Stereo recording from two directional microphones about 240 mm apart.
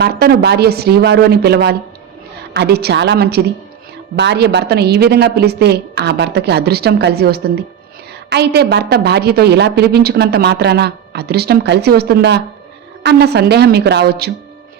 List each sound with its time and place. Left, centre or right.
0.0 s a woman's voice: right